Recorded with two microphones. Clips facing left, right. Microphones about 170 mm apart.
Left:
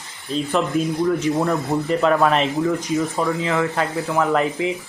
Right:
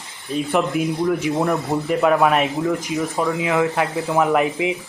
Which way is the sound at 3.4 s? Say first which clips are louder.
Right 2 dB; 15° right (ahead or behind).